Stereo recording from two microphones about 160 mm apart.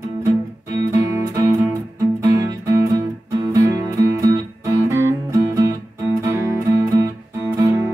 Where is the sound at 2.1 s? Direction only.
20° right (ahead or behind).